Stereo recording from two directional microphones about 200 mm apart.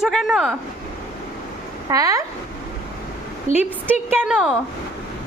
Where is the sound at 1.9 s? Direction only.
15° right (ahead or behind).